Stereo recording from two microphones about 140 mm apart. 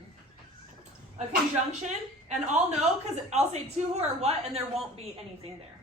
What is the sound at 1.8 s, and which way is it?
A woman's voice, 60° right (ahead or behind).